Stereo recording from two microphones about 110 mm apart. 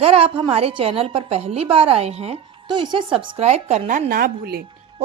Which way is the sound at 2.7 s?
45° right (ahead or behind).